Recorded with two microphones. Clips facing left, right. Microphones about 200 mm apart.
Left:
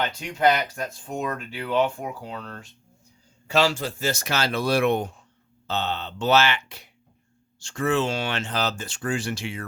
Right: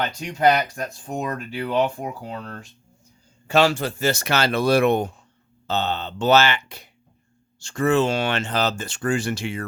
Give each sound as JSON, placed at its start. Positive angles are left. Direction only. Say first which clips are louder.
{"t": 0.2, "sound": "speech", "louder": "right 3 dB", "side_deg": -40}
{"t": 3.4, "sound": "speech", "louder": "right 3 dB", "side_deg": -55}
{"t": 4.8, "sound": "speech", "louder": "right 3 dB", "side_deg": -45}